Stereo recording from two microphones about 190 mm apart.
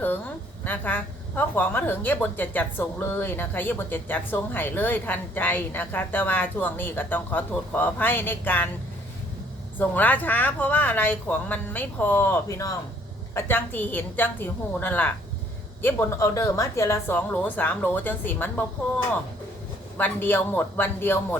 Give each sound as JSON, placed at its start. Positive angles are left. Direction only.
{"t": 0.6, "sound": "a woman's voice", "side_deg": 10}
{"t": 9.7, "sound": "a woman's voice", "side_deg": 10}
{"t": 20.0, "sound": "a woman's voice", "side_deg": 10}